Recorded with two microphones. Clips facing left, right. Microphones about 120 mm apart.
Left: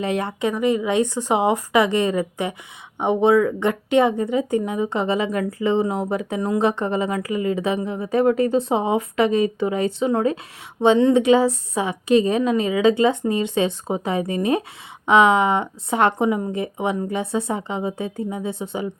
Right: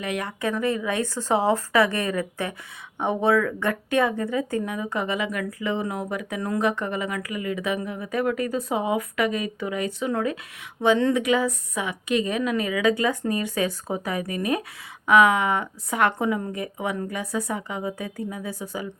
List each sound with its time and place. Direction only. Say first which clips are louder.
0.0 s a woman's voice: left 5 dB; 30° left (ahead or behind)
0.5 s a woman's voice: left 6 dB; 20° left (ahead or behind)